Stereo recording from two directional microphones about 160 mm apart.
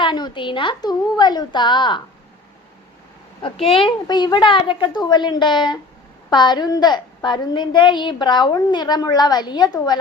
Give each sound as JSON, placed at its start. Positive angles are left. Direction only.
{"t": 0.0, "sound": "a woman's voice", "side_deg": 30}
{"t": 3.4, "sound": "a woman's voice", "side_deg": 35}